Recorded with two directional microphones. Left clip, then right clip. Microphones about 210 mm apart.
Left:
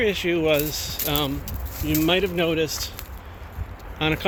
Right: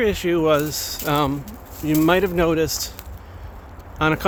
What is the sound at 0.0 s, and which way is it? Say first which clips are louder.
Speech: right 2 dB; 25° right (ahead or behind).